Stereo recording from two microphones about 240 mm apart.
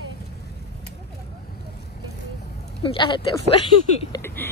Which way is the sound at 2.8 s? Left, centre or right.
Centre.